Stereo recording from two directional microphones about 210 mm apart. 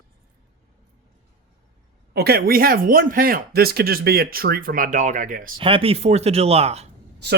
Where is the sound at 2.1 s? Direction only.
50° right (ahead or behind).